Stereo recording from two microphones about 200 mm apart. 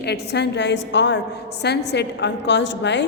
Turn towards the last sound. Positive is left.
turn(degrees=60)  # may be behind; listen again after turning